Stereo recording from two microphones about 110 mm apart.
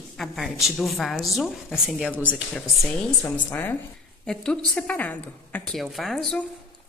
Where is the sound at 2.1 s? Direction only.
15° right (ahead or behind).